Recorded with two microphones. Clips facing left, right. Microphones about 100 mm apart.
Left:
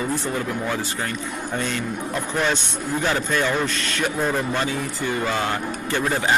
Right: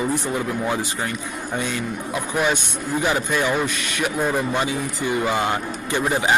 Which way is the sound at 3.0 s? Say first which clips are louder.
Right 1 dB; 15° right (ahead or behind).